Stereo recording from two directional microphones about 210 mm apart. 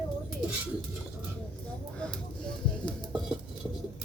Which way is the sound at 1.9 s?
5° left (ahead or behind).